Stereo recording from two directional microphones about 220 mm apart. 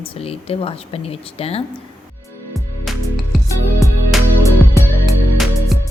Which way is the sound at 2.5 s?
Centre (ahead or behind).